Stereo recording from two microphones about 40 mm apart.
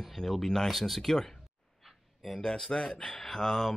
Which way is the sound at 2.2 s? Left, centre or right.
Centre.